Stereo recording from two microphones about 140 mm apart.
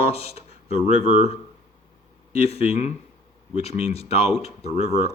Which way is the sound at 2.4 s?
50° left (ahead or behind).